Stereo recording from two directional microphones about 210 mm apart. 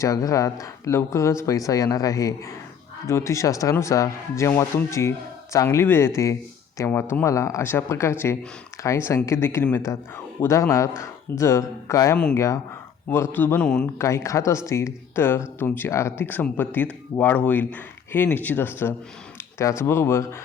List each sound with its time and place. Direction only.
0.0 s speech: 15° left (ahead or behind)